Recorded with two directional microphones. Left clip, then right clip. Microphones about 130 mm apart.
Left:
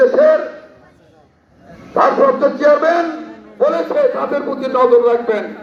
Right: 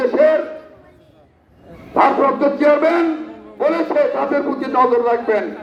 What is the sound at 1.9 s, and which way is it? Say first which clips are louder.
Speech: left 2 dB; 35° right (ahead or behind).